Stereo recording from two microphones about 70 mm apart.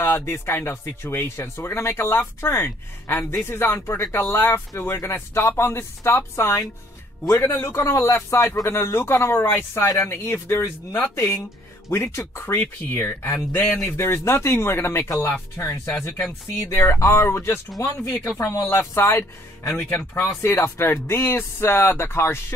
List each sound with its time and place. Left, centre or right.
0.3 s speech: left
7.6 s speech: left
19.7 s speech: left